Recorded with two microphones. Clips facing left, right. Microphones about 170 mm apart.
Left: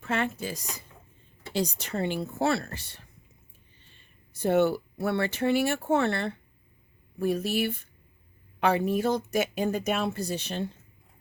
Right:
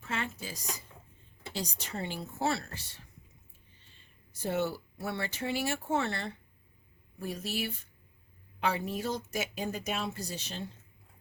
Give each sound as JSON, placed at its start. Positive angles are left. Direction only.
{"t": 0.0, "sound": "speech", "side_deg": 60}
{"t": 4.4, "sound": "speech", "side_deg": 65}